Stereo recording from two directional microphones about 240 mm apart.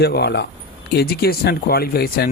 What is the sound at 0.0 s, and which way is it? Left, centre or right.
Speech, left.